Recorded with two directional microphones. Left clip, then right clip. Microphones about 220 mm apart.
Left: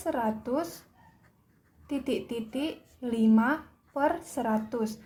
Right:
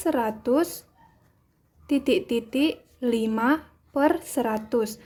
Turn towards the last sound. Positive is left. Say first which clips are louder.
# right 5 dB
turn(degrees=-40)  # may be behind; listen again after turning